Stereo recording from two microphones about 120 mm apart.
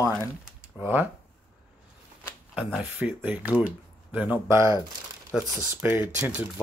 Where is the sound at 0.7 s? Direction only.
15° right (ahead or behind).